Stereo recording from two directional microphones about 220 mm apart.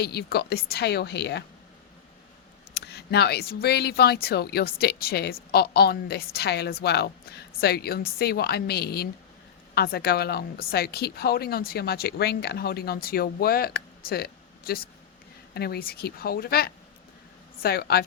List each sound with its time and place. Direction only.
0.0 s speech: 45° left (ahead or behind)
2.7 s speech: 50° left (ahead or behind)